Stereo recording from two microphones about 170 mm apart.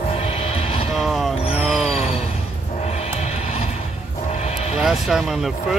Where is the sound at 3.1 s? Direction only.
40° left (ahead or behind).